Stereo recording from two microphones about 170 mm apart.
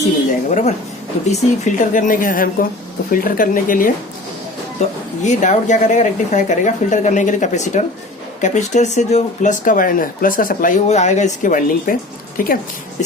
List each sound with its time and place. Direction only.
0.3 s a woman's voice: 45° left (ahead or behind)